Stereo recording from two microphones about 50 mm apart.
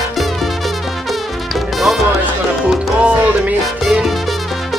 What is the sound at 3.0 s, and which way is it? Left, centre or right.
Music, right.